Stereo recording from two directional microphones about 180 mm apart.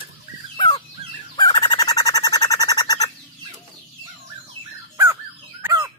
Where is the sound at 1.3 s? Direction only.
25° left (ahead or behind).